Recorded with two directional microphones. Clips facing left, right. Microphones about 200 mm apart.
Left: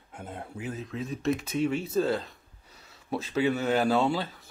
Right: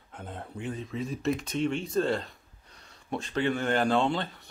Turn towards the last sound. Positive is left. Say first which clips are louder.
# left 1 dB
turn(degrees=5)  # may be behind; listen again after turning